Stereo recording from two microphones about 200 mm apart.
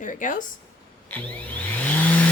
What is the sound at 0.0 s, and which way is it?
Speech, 40° left (ahead or behind).